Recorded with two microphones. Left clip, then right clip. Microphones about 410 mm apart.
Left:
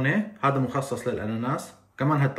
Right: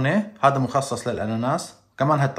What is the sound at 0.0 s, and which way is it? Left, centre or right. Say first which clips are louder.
Speech: right 5 dB; centre.